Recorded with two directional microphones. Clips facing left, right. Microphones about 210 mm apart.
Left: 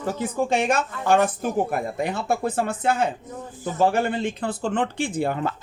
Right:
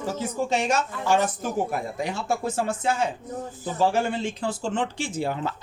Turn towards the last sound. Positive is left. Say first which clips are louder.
# left 3 dB
turn(degrees=55)  # may be behind; listen again after turning